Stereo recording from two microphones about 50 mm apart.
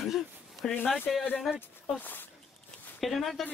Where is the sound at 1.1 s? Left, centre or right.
Centre.